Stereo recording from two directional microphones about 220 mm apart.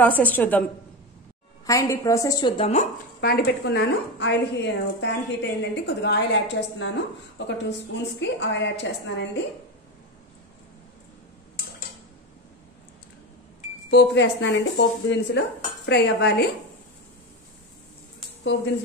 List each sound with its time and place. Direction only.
0.0 s a woman's voice: 5° left (ahead or behind)
1.7 s a woman's voice: 15° left (ahead or behind)
3.2 s a woman's voice: 45° left (ahead or behind)
13.8 s a woman's voice: 50° left (ahead or behind)